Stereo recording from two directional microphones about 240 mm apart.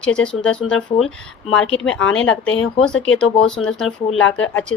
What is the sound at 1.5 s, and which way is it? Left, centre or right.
Speech, left.